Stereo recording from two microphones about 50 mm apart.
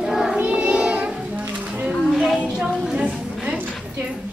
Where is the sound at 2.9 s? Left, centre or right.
Right.